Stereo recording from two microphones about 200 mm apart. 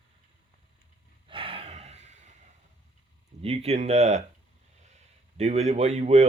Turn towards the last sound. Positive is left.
turn(degrees=-35)  # may be behind; listen again after turning